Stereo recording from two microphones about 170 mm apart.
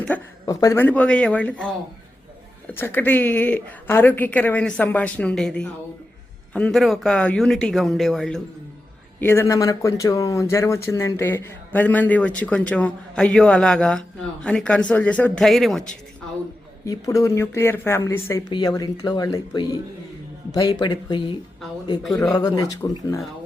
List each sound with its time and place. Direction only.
0.1 s speech: 10° left (ahead or behind)
2.7 s speech: 10° left (ahead or behind)
9.2 s speech: 15° left (ahead or behind)
16.8 s speech: 20° left (ahead or behind)